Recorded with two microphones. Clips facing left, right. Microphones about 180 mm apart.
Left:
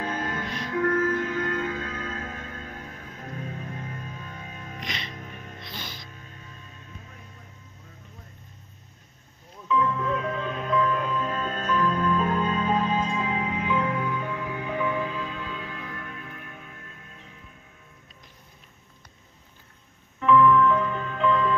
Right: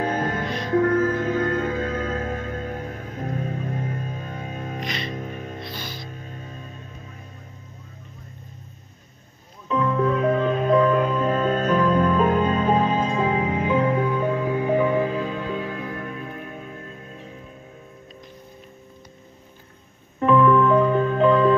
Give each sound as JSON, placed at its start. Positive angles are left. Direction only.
{"t": 0.0, "sound": "music", "side_deg": -50}
{"t": 0.7, "sound": "music", "side_deg": -45}
{"t": 5.7, "sound": "music", "side_deg": 20}
{"t": 9.7, "sound": "music", "side_deg": -50}
{"t": 20.2, "sound": "music", "side_deg": -40}